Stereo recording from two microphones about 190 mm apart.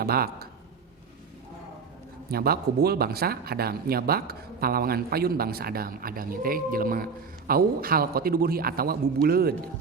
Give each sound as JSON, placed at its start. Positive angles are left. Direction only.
{"t": 0.0, "sound": "speech", "side_deg": -55}
{"t": 2.3, "sound": "speech", "side_deg": -55}